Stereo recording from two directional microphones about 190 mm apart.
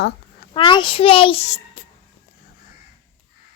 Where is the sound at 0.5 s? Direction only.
25° left (ahead or behind).